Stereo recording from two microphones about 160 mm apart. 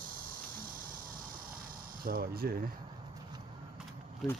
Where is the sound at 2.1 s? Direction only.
70° right (ahead or behind).